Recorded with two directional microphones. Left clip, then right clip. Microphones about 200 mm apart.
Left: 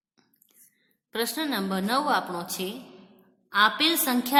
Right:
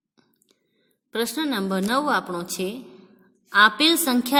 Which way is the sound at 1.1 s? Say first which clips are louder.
Right 3 dB; 35° right (ahead or behind).